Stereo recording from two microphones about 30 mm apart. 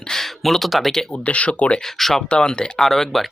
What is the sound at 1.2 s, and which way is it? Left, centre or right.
Speech, left.